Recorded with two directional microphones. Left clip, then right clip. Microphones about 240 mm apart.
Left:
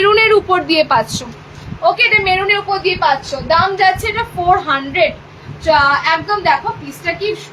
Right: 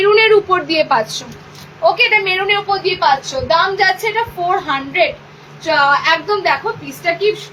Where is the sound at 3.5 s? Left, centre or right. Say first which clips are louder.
Left 1 dB; centre.